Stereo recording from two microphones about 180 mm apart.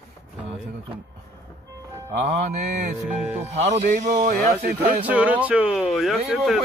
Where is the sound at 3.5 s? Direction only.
40° right (ahead or behind).